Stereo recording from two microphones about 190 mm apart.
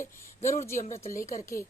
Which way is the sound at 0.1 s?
15° left (ahead or behind).